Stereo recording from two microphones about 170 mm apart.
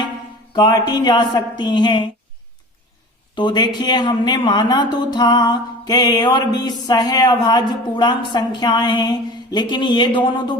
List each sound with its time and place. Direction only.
0.5 s speech: 25° left (ahead or behind)
3.3 s speech: 25° left (ahead or behind)